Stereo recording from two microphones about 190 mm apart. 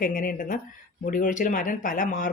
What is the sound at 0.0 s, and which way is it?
Speech, 45° left (ahead or behind).